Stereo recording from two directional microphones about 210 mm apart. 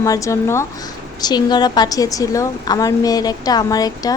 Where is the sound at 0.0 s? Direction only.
15° left (ahead or behind).